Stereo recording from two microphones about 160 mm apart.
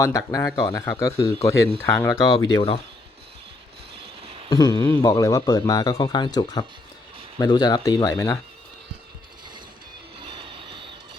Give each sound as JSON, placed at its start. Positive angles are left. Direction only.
{"t": 0.0, "sound": "speech", "side_deg": 20}
{"t": 4.0, "sound": "a sound", "side_deg": -35}
{"t": 4.4, "sound": "speech", "side_deg": 25}
{"t": 10.2, "sound": "train", "side_deg": -35}